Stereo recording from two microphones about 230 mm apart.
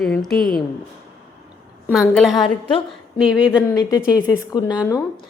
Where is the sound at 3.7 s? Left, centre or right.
Centre.